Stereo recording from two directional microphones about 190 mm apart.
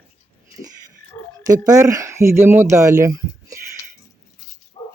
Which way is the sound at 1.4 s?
20° right (ahead or behind).